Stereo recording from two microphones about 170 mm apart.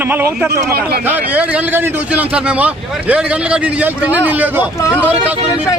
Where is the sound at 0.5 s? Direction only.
70° right (ahead or behind).